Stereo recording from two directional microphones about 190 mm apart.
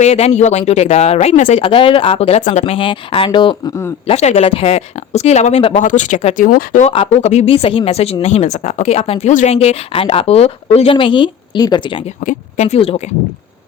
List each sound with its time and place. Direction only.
0.0 s speech: 35° left (ahead or behind); by 3.9 s 20° left (ahead or behind)
4.0 s speech: 35° left (ahead or behind)
12.2 s speech: 40° left (ahead or behind)